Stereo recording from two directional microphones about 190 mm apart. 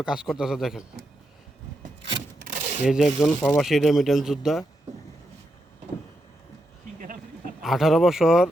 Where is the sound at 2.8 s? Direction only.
Centre (ahead or behind).